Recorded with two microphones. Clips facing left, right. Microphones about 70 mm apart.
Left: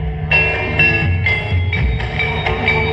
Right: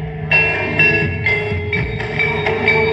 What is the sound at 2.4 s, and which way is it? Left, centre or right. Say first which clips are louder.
Train: right 3 dB; centre.